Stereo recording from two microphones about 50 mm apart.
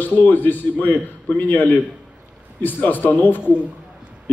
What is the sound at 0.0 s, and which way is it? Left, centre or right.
A man's voice, left.